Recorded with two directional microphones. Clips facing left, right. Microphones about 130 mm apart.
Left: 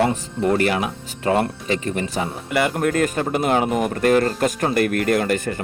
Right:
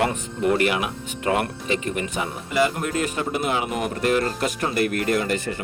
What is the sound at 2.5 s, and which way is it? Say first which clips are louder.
Speech: left 3 dB; 60° left (ahead or behind).